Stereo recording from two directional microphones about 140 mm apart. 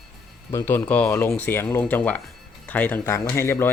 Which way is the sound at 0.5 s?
15° left (ahead or behind).